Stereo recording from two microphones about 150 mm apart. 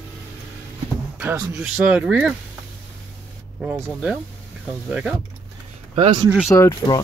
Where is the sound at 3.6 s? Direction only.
10° right (ahead or behind).